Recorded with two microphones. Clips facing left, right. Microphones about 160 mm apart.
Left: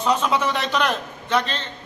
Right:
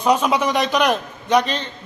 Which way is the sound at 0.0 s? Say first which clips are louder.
Right 3 dB; 10° right (ahead or behind).